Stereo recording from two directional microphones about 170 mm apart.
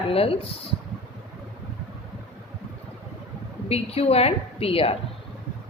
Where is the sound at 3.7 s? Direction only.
35° left (ahead or behind).